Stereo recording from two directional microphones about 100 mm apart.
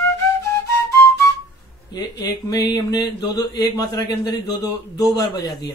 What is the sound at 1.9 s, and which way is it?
Mantra, 40° left (ahead or behind).